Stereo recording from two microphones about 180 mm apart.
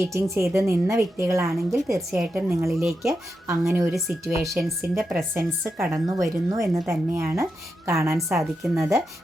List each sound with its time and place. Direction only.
0.0 s a woman's voice: 15° right (ahead or behind)
2.0 s a woman's voice: 5° right (ahead or behind)
2.5 s a woman's voice: 15° right (ahead or behind)